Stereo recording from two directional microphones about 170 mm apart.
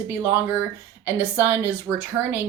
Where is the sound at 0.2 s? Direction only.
15° right (ahead or behind).